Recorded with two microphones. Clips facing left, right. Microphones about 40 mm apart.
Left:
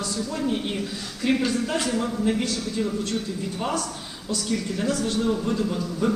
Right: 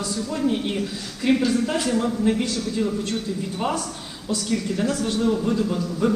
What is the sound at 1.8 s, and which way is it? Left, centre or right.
A man's voice, centre.